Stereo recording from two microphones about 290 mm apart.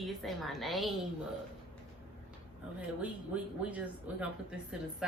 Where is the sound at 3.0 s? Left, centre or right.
Centre.